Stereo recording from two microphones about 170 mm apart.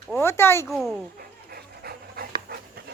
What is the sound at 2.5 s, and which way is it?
Dog, 70° right (ahead or behind).